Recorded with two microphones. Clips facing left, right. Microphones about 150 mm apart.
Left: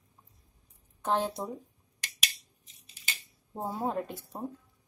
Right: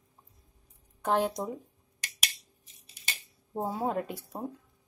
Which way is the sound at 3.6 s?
5° right (ahead or behind).